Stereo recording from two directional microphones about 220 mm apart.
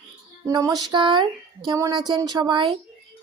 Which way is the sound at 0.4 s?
15° right (ahead or behind).